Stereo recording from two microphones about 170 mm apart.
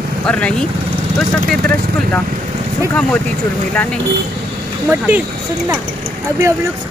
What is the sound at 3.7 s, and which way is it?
Speech, 10° left (ahead or behind).